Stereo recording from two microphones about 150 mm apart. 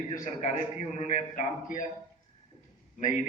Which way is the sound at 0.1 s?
55° left (ahead or behind).